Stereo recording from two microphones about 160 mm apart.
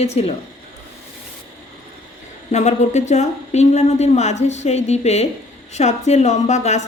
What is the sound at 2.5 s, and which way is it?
Speech, 45° left (ahead or behind).